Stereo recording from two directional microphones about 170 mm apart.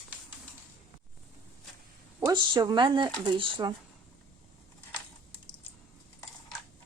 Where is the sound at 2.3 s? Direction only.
25° right (ahead or behind).